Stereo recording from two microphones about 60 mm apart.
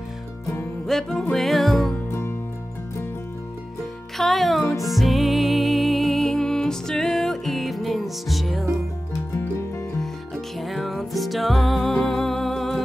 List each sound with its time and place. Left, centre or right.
0.8 s music: centre
2.0 s music: left
4.2 s music: centre
9.9 s music: centre